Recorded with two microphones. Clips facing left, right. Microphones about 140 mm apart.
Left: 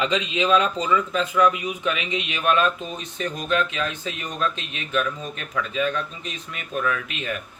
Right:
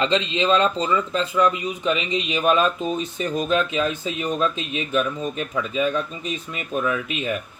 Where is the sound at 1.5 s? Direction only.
10° left (ahead or behind); by 5.5 s 10° right (ahead or behind).